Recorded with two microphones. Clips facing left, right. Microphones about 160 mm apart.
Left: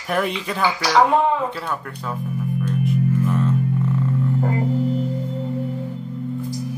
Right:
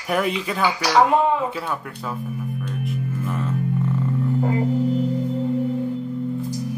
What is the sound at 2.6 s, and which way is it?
Music, centre (ahead or behind).